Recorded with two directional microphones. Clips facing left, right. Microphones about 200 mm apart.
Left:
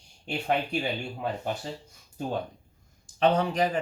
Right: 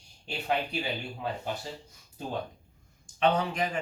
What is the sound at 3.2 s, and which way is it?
Speech, 35° left (ahead or behind).